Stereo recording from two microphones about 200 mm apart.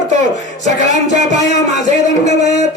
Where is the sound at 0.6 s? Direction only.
35° right (ahead or behind).